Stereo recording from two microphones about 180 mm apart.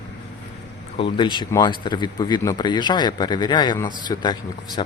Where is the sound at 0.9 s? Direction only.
30° left (ahead or behind).